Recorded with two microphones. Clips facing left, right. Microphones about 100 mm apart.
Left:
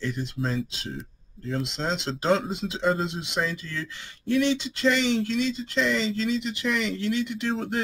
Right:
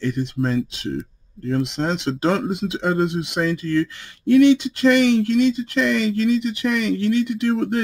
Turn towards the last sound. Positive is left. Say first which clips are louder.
# right 8 dB
turn(degrees=-50)  # may be behind; listen again after turning